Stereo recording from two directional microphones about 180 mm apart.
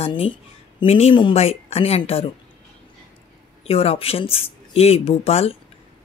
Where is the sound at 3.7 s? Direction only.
30° left (ahead or behind).